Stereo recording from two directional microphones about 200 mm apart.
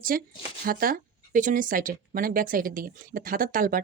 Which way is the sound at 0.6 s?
45° right (ahead or behind).